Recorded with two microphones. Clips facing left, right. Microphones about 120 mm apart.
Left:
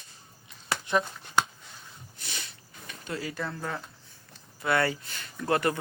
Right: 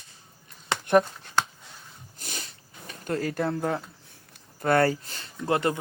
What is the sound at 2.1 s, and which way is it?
Sniff, 40° right (ahead or behind).